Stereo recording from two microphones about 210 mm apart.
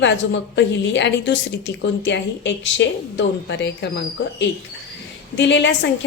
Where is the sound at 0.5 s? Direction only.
60° left (ahead or behind).